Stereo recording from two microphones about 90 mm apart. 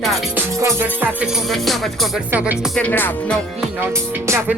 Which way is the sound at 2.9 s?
20° left (ahead or behind).